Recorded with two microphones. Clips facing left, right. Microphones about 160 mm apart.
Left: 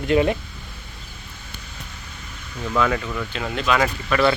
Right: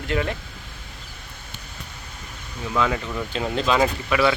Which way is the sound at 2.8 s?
20° right (ahead or behind).